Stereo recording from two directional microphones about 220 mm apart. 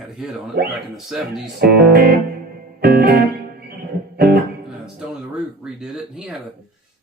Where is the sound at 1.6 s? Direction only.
45° right (ahead or behind).